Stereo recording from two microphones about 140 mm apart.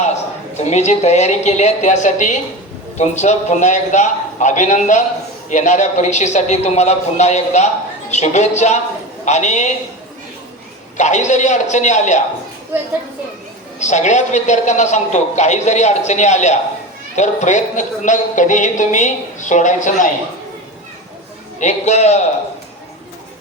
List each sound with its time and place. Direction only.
0.0 s a woman's voice: 55° left (ahead or behind)
10.9 s speech: 60° left (ahead or behind)
13.7 s speech: 55° left (ahead or behind)
21.6 s a man's voice: 55° left (ahead or behind)